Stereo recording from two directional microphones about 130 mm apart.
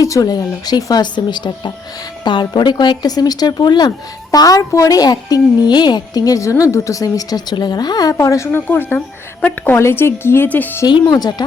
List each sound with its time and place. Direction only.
0.0 s a woman's voice: 25° left (ahead or behind)
10.8 s speech: 30° left (ahead or behind)